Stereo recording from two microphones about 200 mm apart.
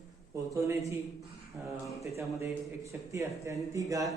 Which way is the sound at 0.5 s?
15° right (ahead or behind).